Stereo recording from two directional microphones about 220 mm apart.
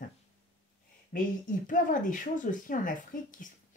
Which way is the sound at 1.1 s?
40° left (ahead or behind).